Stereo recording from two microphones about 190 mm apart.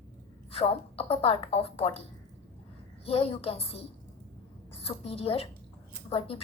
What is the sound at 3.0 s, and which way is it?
A woman's voice, 30° left (ahead or behind).